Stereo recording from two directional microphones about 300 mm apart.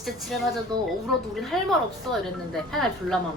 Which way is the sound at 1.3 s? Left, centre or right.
Centre.